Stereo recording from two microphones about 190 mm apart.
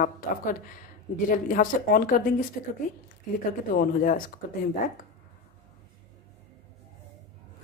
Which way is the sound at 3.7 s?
45° left (ahead or behind).